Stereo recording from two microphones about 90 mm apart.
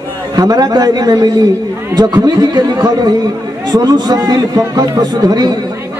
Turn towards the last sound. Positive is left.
turn(degrees=-50)  # may be behind; listen again after turning